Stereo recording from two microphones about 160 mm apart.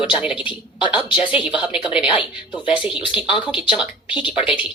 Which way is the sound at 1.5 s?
5° right (ahead or behind).